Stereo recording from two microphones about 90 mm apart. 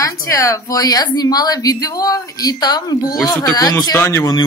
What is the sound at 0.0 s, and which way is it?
A woman's voice, 35° left (ahead or behind).